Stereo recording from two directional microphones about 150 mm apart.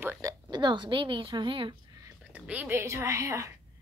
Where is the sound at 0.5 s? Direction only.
30° right (ahead or behind).